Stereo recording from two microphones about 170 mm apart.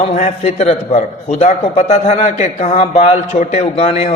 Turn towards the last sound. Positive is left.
turn(degrees=35)  # may be behind; listen again after turning